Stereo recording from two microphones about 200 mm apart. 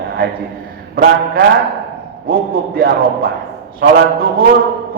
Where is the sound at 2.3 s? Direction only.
50° right (ahead or behind).